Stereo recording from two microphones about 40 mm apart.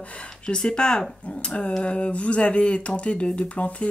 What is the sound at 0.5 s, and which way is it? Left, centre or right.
Speech, left.